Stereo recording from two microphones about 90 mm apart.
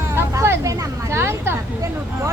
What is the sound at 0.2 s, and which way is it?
Music, 35° right (ahead or behind).